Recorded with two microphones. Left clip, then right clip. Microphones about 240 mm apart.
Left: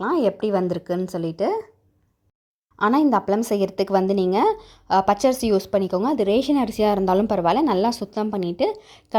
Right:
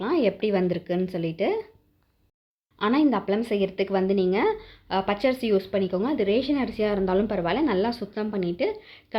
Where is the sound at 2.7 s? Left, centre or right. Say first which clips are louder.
Left 4 dB; left.